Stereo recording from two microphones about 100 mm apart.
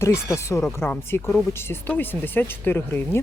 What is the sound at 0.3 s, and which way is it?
Speech, 30° left (ahead or behind).